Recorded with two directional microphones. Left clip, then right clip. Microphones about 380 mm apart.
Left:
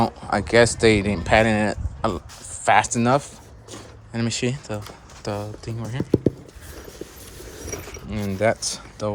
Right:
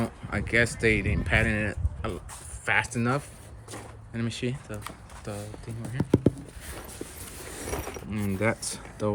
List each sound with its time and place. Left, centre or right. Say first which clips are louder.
0.0 s speech: left 11 dB; centre
8.1 s speech: left 7 dB; centre